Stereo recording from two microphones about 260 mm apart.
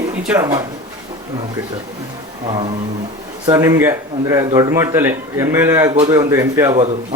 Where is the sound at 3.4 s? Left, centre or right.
Centre.